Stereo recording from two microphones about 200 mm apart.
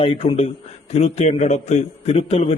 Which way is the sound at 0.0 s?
25° left (ahead or behind).